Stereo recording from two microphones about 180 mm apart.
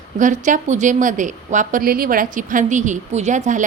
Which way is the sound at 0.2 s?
45° right (ahead or behind).